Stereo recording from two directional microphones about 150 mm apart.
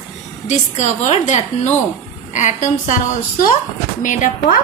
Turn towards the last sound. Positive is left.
turn(degrees=60)  # may be behind; listen again after turning